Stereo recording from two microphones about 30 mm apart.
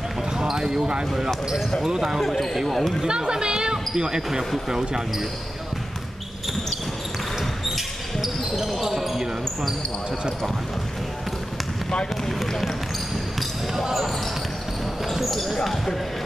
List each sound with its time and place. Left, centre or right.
0.4 s speech: right
1.9 s speech: centre
2.7 s speech: centre
3.1 s speech: right
7.3 s basketball bounce: centre
12.4 s speech: centre
15.3 s speech: centre